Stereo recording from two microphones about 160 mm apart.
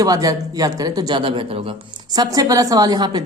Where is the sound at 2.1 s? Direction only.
25° right (ahead or behind).